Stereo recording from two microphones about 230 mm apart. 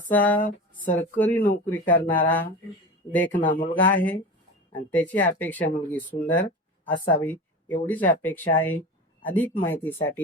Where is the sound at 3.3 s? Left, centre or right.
Left.